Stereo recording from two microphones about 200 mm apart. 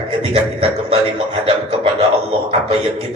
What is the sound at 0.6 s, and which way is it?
A man's voice, 30° right (ahead or behind).